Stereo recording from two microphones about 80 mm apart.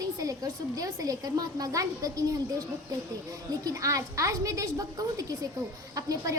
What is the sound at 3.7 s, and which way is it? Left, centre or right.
A woman's voice, right.